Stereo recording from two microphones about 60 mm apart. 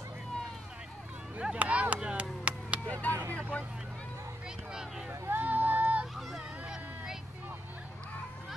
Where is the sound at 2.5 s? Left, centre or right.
Right.